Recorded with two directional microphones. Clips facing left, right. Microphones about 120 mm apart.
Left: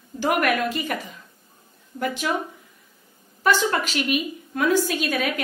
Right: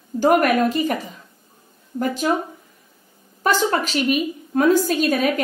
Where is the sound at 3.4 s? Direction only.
40° right (ahead or behind).